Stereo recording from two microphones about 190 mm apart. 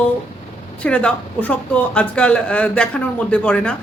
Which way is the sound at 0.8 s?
5° left (ahead or behind).